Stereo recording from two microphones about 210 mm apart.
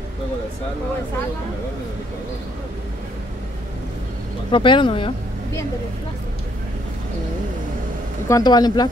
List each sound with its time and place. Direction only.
4.5 s speech: 25° left (ahead or behind)
8.3 s speech: 15° left (ahead or behind)